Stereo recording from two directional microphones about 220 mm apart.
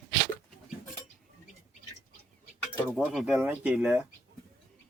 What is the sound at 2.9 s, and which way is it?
A child's voice, 5° right (ahead or behind).